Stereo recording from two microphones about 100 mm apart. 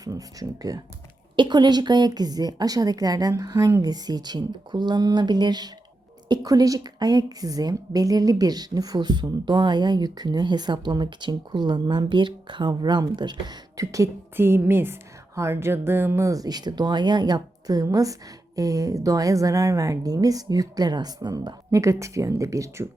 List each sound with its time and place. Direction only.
0.0 s a woman's voice: 35° right (ahead or behind)
13.7 s speech: 35° right (ahead or behind)
14.3 s a sound: 25° right (ahead or behind)
15.4 s speech: 25° right (ahead or behind)